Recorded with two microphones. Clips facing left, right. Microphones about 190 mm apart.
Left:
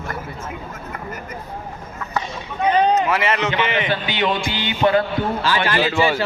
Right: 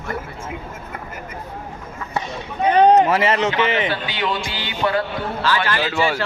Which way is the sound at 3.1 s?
40° right (ahead or behind).